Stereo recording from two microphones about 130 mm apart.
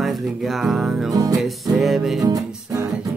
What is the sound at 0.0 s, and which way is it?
Music, centre (ahead or behind).